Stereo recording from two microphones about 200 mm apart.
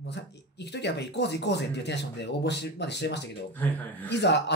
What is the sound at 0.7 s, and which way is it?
Speech, 60° left (ahead or behind).